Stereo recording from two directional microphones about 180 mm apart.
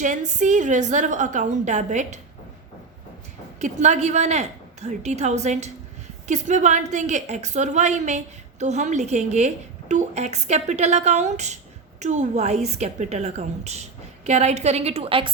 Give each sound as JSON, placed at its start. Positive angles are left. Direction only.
{"t": 0.0, "sound": "a woman's voice", "side_deg": -40}
{"t": 3.6, "sound": "a woman's voice", "side_deg": -40}